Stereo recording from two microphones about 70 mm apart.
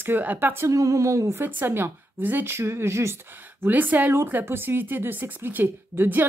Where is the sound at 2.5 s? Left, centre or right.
Right.